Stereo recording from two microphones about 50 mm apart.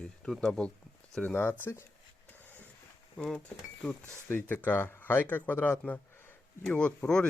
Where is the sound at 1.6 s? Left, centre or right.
Left.